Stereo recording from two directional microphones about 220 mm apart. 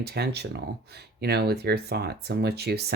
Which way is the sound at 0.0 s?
45° right (ahead or behind).